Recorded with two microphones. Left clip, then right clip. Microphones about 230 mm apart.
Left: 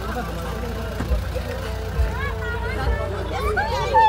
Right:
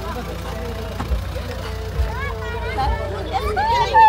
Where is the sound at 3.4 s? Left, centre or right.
Centre.